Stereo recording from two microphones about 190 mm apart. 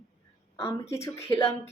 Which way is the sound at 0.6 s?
15° left (ahead or behind).